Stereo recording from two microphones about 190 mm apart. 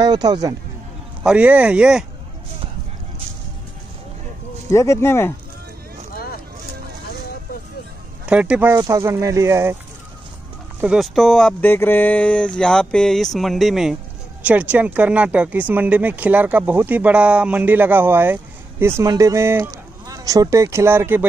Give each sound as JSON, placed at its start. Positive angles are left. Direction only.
{"t": 0.0, "sound": "speech", "side_deg": -20}
{"t": 1.2, "sound": "speech", "side_deg": -5}
{"t": 4.6, "sound": "speech", "side_deg": 15}
{"t": 6.1, "sound": "a sound", "side_deg": 50}
{"t": 8.3, "sound": "speech", "side_deg": -5}
{"t": 10.8, "sound": "speech", "side_deg": -5}